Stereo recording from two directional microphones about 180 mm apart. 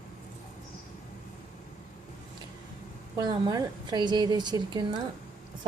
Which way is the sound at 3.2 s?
20° right (ahead or behind).